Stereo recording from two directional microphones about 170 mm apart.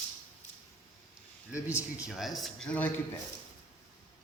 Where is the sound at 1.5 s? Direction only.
20° left (ahead or behind).